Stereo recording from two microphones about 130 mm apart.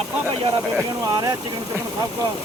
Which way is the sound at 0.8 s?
25° right (ahead or behind).